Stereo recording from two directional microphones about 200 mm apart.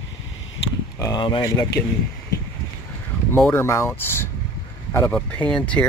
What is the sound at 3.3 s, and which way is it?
Speech, 10° left (ahead or behind).